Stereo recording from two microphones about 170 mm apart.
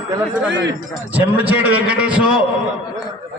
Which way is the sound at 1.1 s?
10° right (ahead or behind).